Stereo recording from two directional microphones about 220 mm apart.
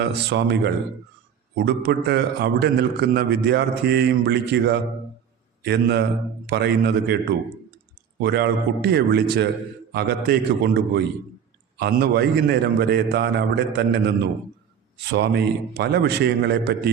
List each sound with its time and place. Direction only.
0.0 s a man's voice: 50° right (ahead or behind)
8.2 s a man's voice: 50° right (ahead or behind)